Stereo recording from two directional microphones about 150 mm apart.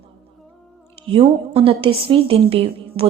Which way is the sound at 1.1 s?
35° right (ahead or behind).